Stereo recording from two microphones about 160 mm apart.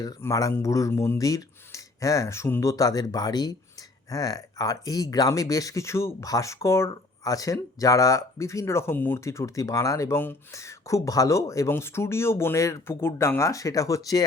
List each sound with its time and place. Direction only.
0.0 s speech: 20° left (ahead or behind)